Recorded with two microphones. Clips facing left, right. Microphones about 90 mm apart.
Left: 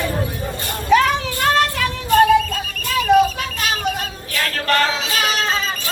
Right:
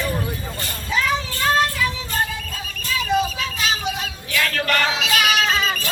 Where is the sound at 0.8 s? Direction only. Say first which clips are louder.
Left 7 dB; 65° left (ahead or behind).